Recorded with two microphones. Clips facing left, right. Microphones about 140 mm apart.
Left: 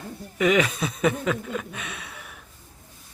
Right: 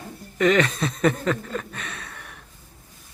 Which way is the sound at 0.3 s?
5° left (ahead or behind).